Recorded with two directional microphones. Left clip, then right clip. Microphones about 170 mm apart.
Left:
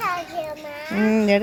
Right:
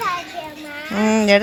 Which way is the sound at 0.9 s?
20° left (ahead or behind).